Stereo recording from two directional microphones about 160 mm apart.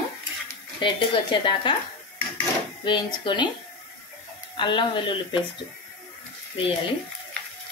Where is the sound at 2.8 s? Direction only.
30° left (ahead or behind).